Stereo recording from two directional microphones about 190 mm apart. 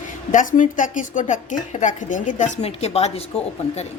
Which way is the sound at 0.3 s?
40° left (ahead or behind).